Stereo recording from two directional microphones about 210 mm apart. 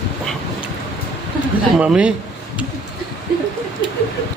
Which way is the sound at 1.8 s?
5° right (ahead or behind).